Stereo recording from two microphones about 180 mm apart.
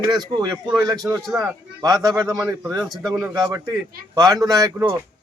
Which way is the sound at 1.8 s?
20° right (ahead or behind).